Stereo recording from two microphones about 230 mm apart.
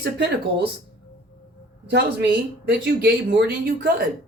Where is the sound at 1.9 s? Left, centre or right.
Right.